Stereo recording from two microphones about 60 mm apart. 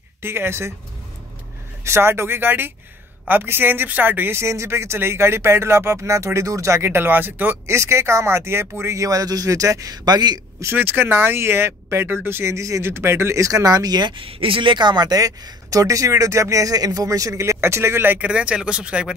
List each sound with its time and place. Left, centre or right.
0.2 s speech: right
1.9 s speech: right
4.4 s speech: right
6.9 s speech: right
7.6 s speech: right
10.8 s speech: right
12.5 s speech: right
12.8 s speech: right
13.4 s speech: right
15.0 s speech: right
18.2 s speech: centre